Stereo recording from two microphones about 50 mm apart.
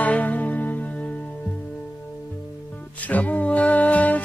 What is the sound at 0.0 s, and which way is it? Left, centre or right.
Music, left.